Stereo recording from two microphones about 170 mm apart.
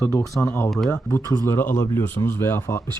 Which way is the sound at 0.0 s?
10° left (ahead or behind).